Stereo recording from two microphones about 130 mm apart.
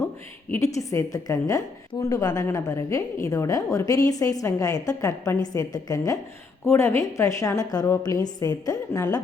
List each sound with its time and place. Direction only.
0.5 s a woman's voice: 25° left (ahead or behind)